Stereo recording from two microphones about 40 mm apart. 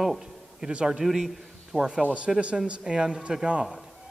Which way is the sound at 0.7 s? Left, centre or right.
Right.